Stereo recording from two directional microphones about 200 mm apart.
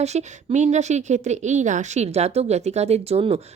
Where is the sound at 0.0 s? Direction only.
35° right (ahead or behind).